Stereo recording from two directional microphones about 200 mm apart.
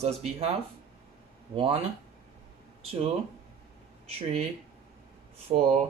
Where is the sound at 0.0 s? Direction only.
30° right (ahead or behind).